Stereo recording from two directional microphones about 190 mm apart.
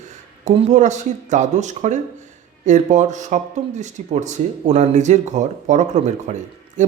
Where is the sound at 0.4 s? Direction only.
40° right (ahead or behind).